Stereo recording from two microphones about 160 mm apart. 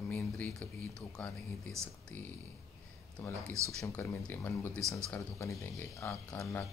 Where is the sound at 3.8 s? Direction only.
15° left (ahead or behind).